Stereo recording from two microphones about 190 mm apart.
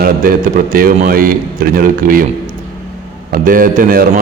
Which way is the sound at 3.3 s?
45° right (ahead or behind).